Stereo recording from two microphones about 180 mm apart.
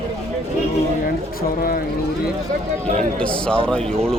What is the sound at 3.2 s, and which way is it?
Speech, 5° left (ahead or behind).